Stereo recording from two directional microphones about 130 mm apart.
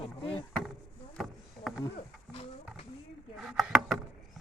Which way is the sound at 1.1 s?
Centre (ahead or behind).